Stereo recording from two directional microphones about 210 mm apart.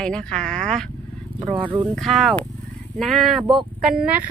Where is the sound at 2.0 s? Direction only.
Centre (ahead or behind).